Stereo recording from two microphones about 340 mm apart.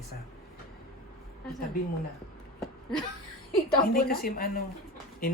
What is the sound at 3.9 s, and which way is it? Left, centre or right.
Speech, left.